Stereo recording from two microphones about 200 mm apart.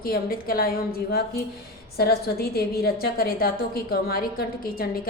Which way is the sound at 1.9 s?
50° left (ahead or behind).